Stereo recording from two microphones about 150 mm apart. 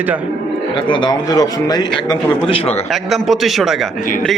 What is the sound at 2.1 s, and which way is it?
Speech, 40° left (ahead or behind).